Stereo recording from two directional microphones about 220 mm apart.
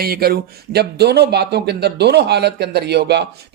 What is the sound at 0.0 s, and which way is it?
Speech, 45° right (ahead or behind).